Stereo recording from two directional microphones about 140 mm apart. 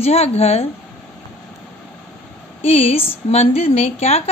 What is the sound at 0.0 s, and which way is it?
Speech, 50° left (ahead or behind).